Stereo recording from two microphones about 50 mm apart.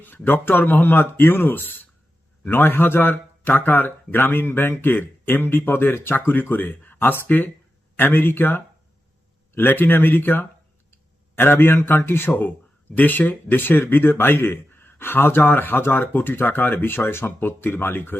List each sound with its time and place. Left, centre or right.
0.0 s speech: left
13.0 s speech: left